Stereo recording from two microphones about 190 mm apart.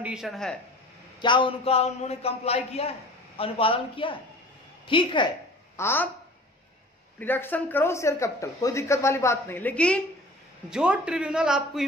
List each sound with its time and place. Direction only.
0.0 s a man's voice: 5° right (ahead or behind)
1.2 s a man's voice: 25° left (ahead or behind)
5.8 s a woman's voice: 10° left (ahead or behind)
7.2 s speech: 10° left (ahead or behind)
10.7 s a man's voice: 5° right (ahead or behind)